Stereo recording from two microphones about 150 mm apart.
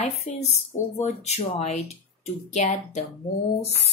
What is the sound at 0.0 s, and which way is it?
Speech, 45° left (ahead or behind).